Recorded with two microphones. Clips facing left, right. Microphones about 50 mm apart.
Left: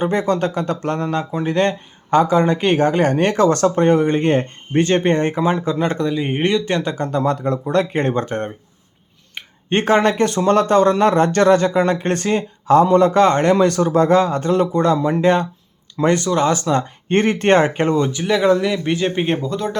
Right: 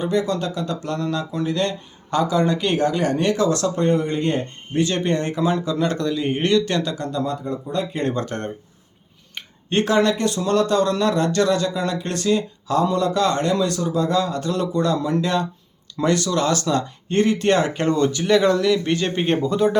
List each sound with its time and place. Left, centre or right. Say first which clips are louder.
0.0 s speech: left 4 dB; left
6.9 s speech: left 5 dB; left
8.0 s speech: left 3 dB; left
9.6 s speech: left 3 dB; left
16.8 s speech: left 2 dB; left
17.7 s speech: left 2 dB; centre